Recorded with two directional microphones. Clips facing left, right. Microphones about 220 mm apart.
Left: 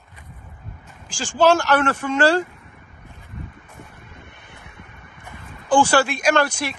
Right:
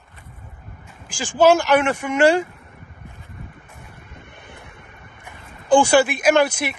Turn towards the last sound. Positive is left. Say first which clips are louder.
# right 3 dB
turn(degrees=-10)  # may be behind; listen again after turning